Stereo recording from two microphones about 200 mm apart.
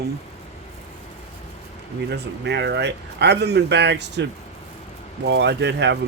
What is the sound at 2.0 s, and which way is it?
Speech, 55° right (ahead or behind).